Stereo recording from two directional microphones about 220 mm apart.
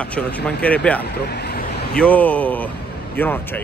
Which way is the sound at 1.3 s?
45° left (ahead or behind).